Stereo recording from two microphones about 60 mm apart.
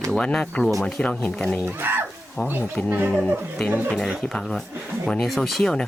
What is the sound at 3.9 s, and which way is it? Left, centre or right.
Speech, centre.